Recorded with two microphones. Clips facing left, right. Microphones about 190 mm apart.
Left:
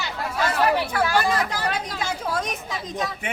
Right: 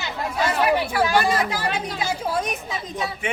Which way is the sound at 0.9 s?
15° right (ahead or behind).